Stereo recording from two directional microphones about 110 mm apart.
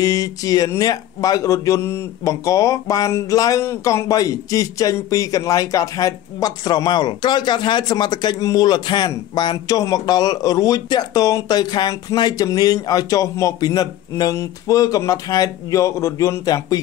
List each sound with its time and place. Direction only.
0.0 s speech: 35° left (ahead or behind)